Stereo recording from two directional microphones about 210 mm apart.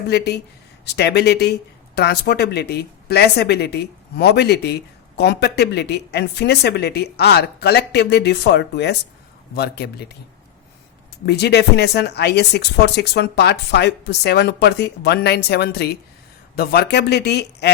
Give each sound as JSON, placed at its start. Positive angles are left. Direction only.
{"t": 0.9, "sound": "a woman's voice", "side_deg": 50}
{"t": 11.3, "sound": "a woman's voice", "side_deg": 50}